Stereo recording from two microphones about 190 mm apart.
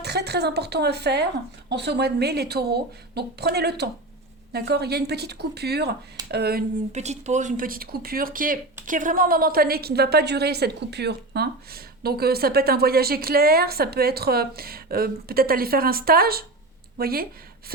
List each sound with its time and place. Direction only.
0.0 s a woman's voice: 60° right (ahead or behind)
6.9 s a woman's voice: 35° right (ahead or behind); by 17.2 s 50° right (ahead or behind)